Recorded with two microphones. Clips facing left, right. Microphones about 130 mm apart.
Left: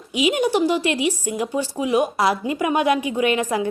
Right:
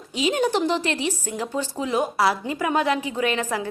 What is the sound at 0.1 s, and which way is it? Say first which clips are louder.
A woman's voice: left 3 dB; 10° left (ahead or behind).